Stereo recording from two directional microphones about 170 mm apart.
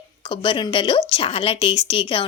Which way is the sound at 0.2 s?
30° left (ahead or behind).